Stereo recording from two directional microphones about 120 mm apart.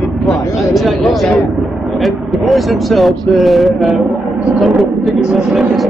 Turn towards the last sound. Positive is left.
turn(degrees=-5)  # may be behind; listen again after turning